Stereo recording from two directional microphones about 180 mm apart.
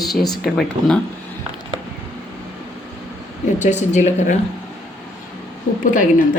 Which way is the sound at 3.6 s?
40° left (ahead or behind).